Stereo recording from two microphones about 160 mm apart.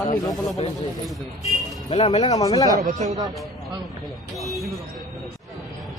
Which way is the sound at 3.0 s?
25° right (ahead or behind).